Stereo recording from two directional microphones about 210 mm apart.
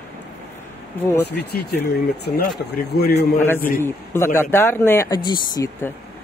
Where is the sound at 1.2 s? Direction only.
50° left (ahead or behind).